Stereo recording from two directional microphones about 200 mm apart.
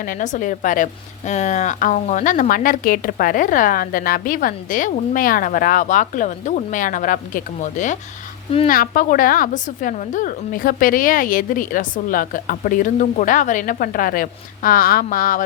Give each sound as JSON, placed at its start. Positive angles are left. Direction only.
{"t": 0.0, "sound": "a woman's voice", "side_deg": 40}